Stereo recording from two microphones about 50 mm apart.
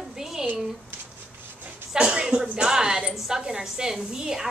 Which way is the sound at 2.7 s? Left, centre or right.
Centre.